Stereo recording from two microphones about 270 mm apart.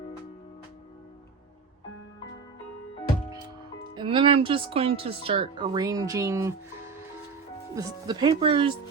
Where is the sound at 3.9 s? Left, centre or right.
Centre.